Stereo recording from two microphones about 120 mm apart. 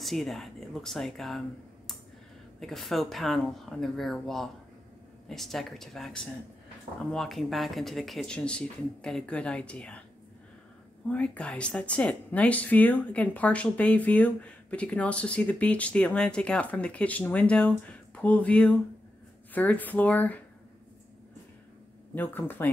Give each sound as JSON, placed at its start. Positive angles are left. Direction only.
{"t": 0.0, "sound": "speech", "side_deg": 0}
{"t": 2.6, "sound": "speech", "side_deg": 0}
{"t": 11.1, "sound": "speech", "side_deg": 10}
{"t": 22.1, "sound": "speech", "side_deg": 15}